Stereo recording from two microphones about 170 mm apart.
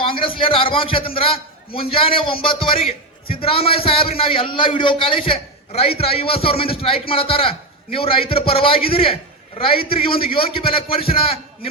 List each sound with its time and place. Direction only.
0.0 s a man's voice: 30° left (ahead or behind)